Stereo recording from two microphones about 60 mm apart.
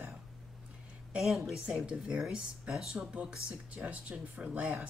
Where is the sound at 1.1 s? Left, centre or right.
Centre.